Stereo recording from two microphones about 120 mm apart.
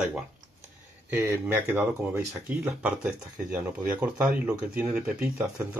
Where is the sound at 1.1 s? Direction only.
15° right (ahead or behind).